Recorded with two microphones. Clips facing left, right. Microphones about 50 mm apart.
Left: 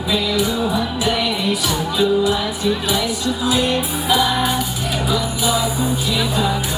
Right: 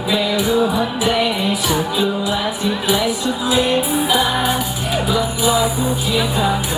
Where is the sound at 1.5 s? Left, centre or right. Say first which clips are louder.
Right 2 dB; centre.